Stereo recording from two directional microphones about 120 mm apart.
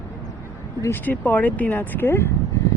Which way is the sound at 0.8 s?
15° left (ahead or behind).